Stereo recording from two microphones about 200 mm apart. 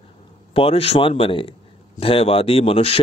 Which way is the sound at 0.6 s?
30° left (ahead or behind).